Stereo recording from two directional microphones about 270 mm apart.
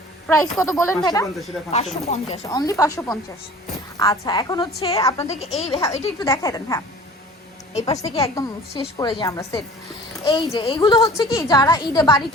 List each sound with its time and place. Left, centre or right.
0.3 s a woman's voice: centre
7.7 s a woman's voice: left